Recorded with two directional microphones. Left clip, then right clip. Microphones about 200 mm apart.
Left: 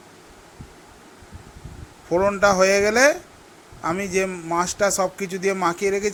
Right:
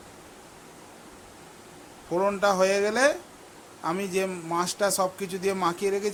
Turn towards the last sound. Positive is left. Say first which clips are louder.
# left 5 dB
turn(degrees=15)  # may be behind; listen again after turning